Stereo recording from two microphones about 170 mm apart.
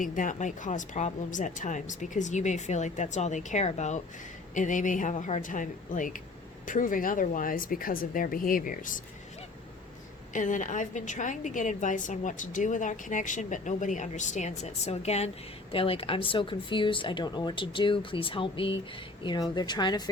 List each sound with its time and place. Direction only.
0.0 s a woman's voice: 50° left (ahead or behind)
10.3 s a woman's voice: 50° left (ahead or behind); by 20.1 s 25° left (ahead or behind)